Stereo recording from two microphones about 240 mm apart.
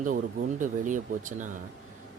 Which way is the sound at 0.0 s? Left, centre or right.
Right.